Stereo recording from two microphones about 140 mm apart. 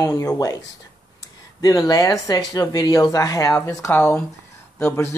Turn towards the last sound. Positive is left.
turn(degrees=20)  # may be behind; listen again after turning